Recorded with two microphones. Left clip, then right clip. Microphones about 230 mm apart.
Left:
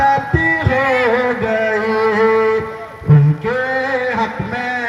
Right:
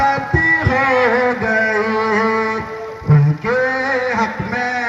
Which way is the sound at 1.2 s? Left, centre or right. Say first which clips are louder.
Right 1 dB; left.